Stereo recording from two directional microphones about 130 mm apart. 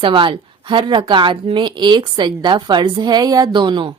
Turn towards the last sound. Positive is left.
turn(degrees=-40)  # may be behind; listen again after turning